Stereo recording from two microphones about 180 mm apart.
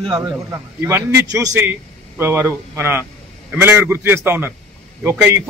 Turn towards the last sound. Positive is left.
turn(degrees=-10)  # may be behind; listen again after turning